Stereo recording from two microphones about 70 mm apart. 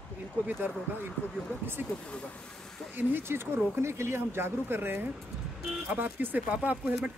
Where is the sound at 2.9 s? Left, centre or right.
Right.